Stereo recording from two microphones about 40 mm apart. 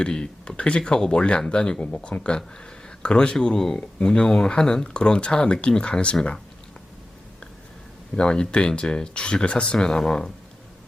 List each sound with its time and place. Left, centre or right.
0.0 s speech: left
8.1 s speech: left